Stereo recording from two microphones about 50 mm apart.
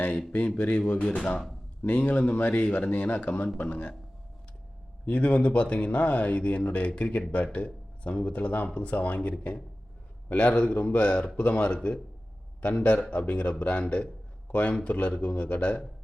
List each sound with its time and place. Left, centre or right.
0.3 s speech: left
5.0 s speech: left